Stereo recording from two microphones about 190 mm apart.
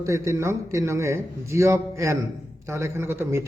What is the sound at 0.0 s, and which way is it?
A man's voice, 15° right (ahead or behind).